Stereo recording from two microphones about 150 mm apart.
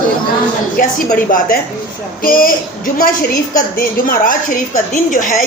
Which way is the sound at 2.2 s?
70° left (ahead or behind).